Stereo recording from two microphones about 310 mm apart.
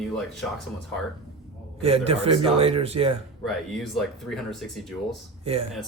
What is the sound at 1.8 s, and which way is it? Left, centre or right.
A man's voice, centre.